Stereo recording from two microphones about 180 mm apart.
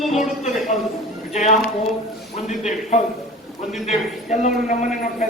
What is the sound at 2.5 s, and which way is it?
A man's voice, 40° left (ahead or behind).